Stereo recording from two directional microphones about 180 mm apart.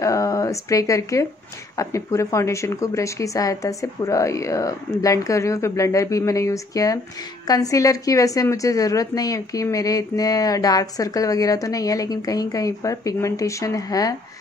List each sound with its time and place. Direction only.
0.0 s a woman's voice: 20° left (ahead or behind)